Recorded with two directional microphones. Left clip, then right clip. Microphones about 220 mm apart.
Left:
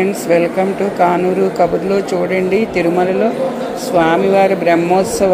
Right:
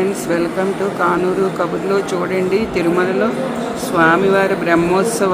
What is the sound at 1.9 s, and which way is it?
Speech, 10° left (ahead or behind).